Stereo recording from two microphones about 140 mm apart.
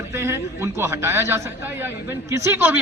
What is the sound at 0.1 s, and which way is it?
A man's voice, 20° right (ahead or behind).